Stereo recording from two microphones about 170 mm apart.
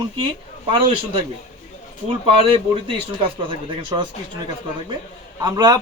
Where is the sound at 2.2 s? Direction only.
35° right (ahead or behind).